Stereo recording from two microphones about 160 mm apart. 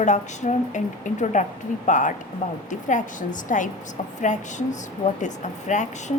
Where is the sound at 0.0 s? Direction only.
50° left (ahead or behind).